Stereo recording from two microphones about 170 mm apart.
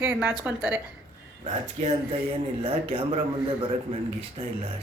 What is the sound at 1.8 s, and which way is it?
Speech, 40° right (ahead or behind).